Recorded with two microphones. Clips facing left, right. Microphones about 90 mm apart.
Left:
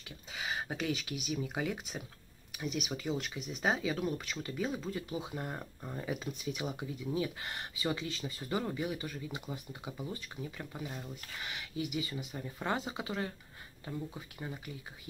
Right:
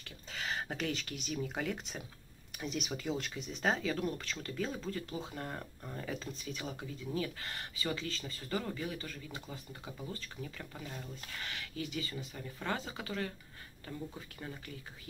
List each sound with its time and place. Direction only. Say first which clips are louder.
0.0 s speech: even; 10° left (ahead or behind)